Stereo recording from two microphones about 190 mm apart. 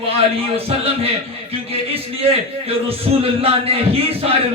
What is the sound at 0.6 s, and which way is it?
Speech, 30° right (ahead or behind).